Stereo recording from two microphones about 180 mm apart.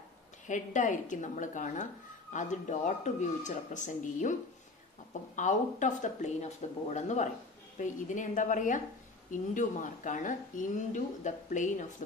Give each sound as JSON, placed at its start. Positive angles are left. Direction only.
{"t": 0.5, "sound": "a woman's voice", "side_deg": 45}